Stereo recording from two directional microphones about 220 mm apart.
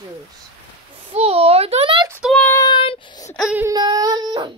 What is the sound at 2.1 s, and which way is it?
Speech, 5° right (ahead or behind).